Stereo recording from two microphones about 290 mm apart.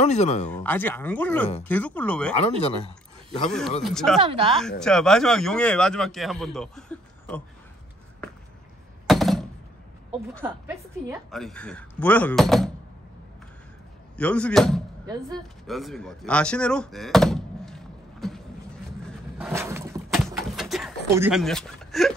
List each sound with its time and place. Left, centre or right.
0.0 s speech: left
0.5 s speech: centre
4.2 s speech: centre
4.5 s speech: centre
9.0 s a sound: centre
10.4 s a woman's voice: centre
11.2 s speech: centre
14.1 s speech: centre
19.3 s a sound: centre